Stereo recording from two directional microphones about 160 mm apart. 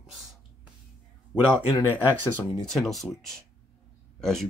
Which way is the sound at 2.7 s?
Centre (ahead or behind).